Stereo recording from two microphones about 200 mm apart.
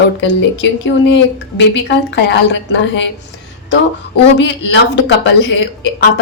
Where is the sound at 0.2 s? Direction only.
65° left (ahead or behind).